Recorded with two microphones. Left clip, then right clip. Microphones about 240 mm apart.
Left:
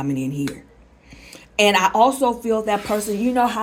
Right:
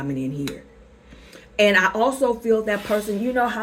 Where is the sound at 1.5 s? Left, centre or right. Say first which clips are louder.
Left 2 dB; left.